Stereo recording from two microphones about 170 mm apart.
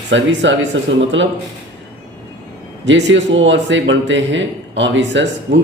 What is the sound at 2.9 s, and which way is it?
A man's voice, 90° right.